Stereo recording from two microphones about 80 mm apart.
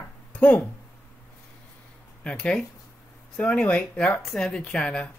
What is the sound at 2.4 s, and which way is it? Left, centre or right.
Speech, centre.